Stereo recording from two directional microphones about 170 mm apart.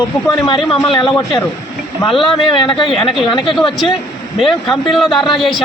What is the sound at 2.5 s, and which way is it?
A man's voice, 30° left (ahead or behind).